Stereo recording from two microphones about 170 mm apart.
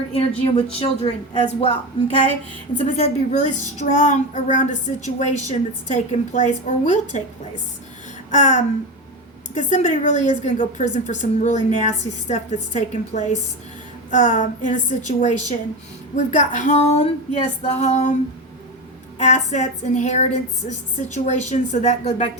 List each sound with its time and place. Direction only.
0.2 s a woman's voice: 35° left (ahead or behind)
19.2 s a woman's voice: 45° left (ahead or behind)